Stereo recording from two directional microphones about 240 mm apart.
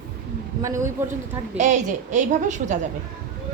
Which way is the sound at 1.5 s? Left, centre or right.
Right.